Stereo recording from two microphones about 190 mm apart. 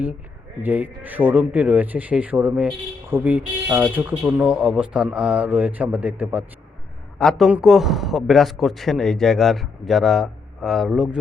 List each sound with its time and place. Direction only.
0.6 s a man's voice: 10° right (ahead or behind)